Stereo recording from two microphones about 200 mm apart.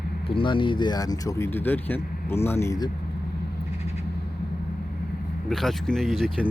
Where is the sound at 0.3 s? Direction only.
25° left (ahead or behind).